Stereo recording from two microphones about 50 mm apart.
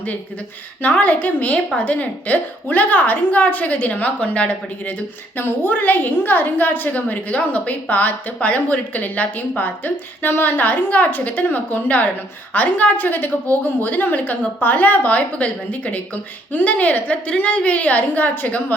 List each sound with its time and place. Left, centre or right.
0.8 s a woman's voice: left